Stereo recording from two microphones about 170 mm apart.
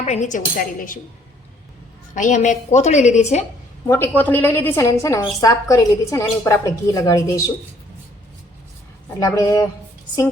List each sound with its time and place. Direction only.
0.0 s a woman's voice: 45° left (ahead or behind)
2.1 s a woman's voice: 45° left (ahead or behind)
3.8 s a woman's voice: 10° left (ahead or behind)
9.2 s speech: 20° left (ahead or behind)